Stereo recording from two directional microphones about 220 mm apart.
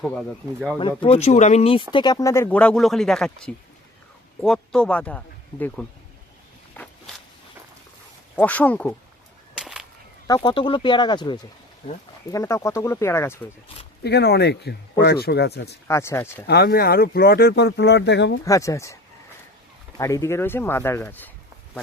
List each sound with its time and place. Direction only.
0.0 s speech: centre (ahead or behind)
0.8 s speech: 25° left (ahead or behind); by 5.8 s 5° left (ahead or behind)
6.8 s a sound: 10° left (ahead or behind)
8.4 s speech: 5° left (ahead or behind)
9.6 s whip: centre (ahead or behind)
10.2 s speech: 20° left (ahead or behind)
14.0 s speech: 50° left (ahead or behind)
15.9 s speech: 15° left (ahead or behind)
16.5 s speech: 45° left (ahead or behind)
18.4 s speech: 15° left (ahead or behind)
20.0 s speech: 15° left (ahead or behind)